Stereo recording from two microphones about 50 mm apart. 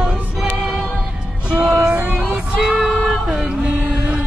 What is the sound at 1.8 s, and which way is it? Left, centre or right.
Child singing, right.